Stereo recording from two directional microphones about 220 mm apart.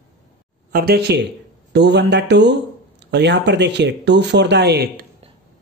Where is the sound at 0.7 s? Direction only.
40° right (ahead or behind).